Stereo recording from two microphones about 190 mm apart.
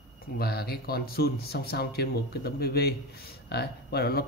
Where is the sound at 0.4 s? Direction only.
55° left (ahead or behind).